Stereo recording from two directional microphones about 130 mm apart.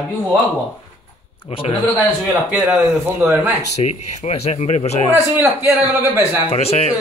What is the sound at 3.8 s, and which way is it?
Speech, 55° left (ahead or behind).